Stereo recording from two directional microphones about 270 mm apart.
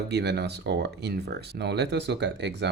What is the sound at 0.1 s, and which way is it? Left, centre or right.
Speech, right.